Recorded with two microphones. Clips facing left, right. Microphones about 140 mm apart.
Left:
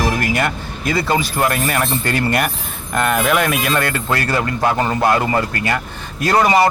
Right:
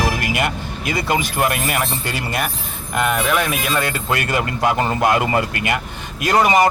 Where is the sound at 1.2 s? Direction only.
15° right (ahead or behind); by 3.6 s centre (ahead or behind).